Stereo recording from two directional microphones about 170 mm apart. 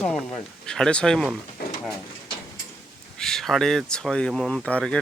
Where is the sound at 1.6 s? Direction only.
65° left (ahead or behind).